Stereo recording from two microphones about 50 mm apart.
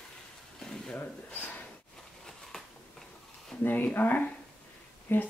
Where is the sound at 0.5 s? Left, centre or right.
Centre.